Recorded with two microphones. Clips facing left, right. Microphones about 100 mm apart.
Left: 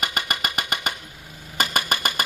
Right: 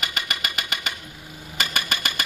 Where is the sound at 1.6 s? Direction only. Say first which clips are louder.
Left 4 dB; 45° left (ahead or behind).